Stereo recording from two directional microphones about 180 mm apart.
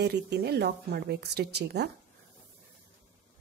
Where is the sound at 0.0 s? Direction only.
65° right (ahead or behind).